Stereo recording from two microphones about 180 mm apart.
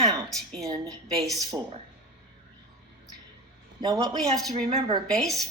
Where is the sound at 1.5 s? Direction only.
15° right (ahead or behind).